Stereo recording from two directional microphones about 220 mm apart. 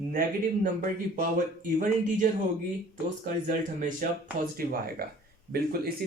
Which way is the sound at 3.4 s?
35° right (ahead or behind).